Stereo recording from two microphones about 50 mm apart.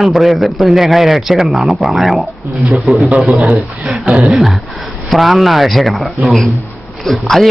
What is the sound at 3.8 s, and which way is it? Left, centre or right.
Speech, centre.